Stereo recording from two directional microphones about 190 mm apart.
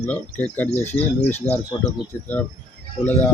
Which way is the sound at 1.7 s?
25° left (ahead or behind).